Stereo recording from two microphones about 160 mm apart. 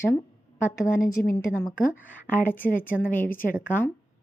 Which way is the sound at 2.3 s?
10° left (ahead or behind).